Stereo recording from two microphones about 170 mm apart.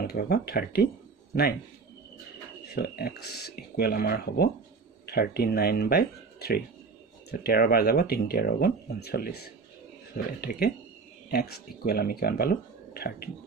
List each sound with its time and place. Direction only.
0.0 s speech: 70° left (ahead or behind)
2.7 s speech: 65° left (ahead or behind)